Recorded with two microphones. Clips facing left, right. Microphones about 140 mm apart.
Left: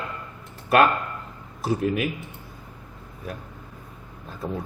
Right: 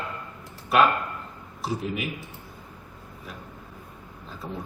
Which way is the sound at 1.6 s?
55° left (ahead or behind).